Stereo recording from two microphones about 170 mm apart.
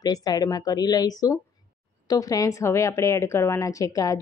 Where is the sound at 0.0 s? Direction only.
25° left (ahead or behind).